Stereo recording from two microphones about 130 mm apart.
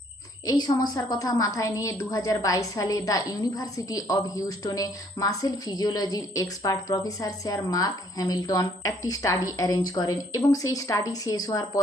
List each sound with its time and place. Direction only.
0.4 s a woman's voice: 30° left (ahead or behind)